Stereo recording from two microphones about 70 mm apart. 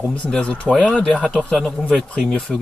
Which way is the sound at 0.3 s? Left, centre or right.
Centre.